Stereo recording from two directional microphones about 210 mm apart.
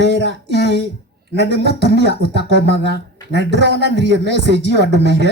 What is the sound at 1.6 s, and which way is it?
Speech, 55° right (ahead or behind).